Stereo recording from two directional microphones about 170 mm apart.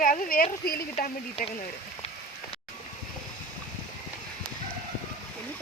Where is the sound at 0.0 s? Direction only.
55° left (ahead or behind).